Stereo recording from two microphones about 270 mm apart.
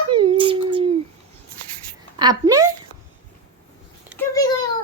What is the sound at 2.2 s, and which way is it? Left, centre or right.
Speech, centre.